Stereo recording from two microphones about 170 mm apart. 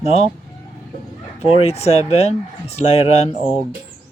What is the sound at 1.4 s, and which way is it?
Speech, 35° left (ahead or behind).